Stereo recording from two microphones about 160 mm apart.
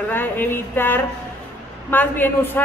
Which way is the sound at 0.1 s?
15° left (ahead or behind).